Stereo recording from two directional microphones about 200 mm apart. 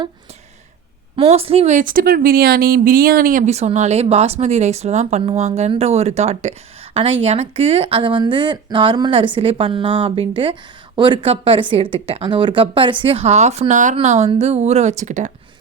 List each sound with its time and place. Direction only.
1.1 s a woman's voice: 30° right (ahead or behind)